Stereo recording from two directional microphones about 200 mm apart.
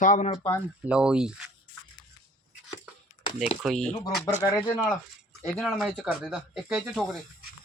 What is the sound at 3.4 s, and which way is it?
Speech, centre (ahead or behind).